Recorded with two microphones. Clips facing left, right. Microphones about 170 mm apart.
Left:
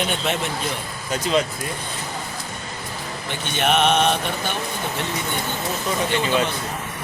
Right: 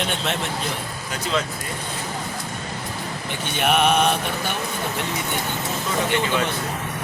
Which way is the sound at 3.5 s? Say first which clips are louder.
Even; 5° right (ahead or behind).